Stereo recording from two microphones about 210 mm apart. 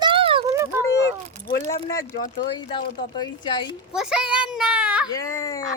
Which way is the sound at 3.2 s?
20° left (ahead or behind).